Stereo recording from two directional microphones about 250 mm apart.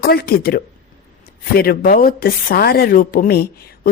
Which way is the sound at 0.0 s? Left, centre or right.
Left.